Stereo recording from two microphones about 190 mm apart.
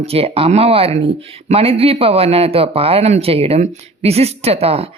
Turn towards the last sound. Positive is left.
turn(degrees=-30)  # may be behind; listen again after turning